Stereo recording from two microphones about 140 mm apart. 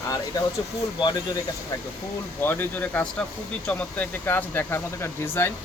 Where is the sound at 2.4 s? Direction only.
15° left (ahead or behind).